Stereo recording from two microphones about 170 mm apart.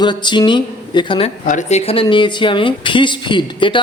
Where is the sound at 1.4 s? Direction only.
45° left (ahead or behind).